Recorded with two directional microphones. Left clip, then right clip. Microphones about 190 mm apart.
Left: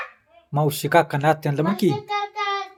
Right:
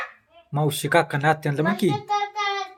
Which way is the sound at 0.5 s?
10° left (ahead or behind).